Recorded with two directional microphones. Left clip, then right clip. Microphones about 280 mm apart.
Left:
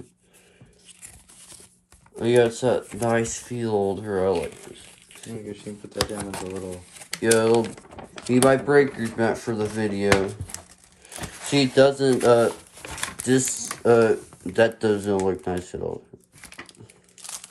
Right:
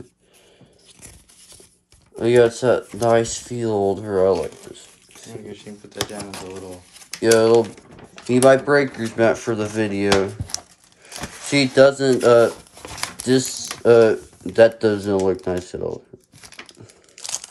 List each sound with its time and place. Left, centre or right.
2.1 s speech: centre
5.5 s speech: left
7.2 s speech: centre
11.7 s speech: centre